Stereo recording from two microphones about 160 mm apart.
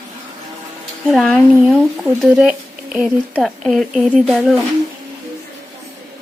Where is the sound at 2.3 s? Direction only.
5° right (ahead or behind).